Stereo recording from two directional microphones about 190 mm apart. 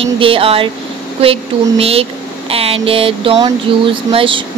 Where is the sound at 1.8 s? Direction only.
30° right (ahead or behind).